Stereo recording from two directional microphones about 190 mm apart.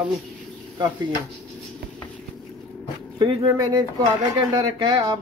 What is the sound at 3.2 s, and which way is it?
Speech, 20° right (ahead or behind).